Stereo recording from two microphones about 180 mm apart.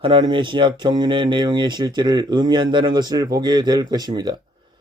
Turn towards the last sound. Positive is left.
turn(degrees=-20)  # may be behind; listen again after turning